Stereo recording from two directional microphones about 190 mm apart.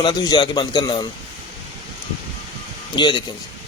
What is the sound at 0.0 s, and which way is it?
A man's voice, 20° left (ahead or behind).